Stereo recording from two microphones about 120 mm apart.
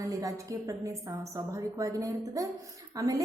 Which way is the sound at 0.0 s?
30° right (ahead or behind).